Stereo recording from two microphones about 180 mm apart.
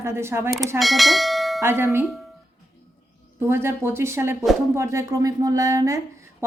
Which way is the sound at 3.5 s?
15° right (ahead or behind).